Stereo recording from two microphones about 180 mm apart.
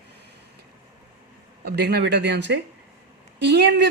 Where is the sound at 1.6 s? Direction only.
65° right (ahead or behind).